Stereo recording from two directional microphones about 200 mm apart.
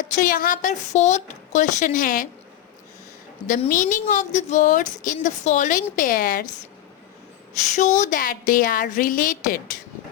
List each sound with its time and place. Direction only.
0.0 s a woman's voice: 45° left (ahead or behind)
3.4 s a woman's voice: 40° left (ahead or behind)
7.8 s a woman's voice: 35° left (ahead or behind)